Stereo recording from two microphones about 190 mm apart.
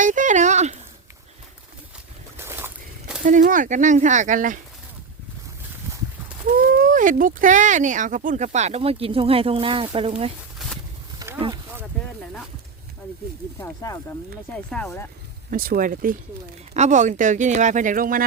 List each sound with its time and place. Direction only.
0.0 s a sound: 40° right (ahead or behind)
2.4 s a sound: 10° right (ahead or behind)
3.2 s speech: 45° right (ahead or behind)
6.7 s speech: 45° right (ahead or behind); by 10.3 s 30° right (ahead or behind)
11.3 s speech: 25° right (ahead or behind)
13.6 s speech: 15° left (ahead or behind)
14.5 s speech: 5° left (ahead or behind)
15.4 s speech: 50° right (ahead or behind)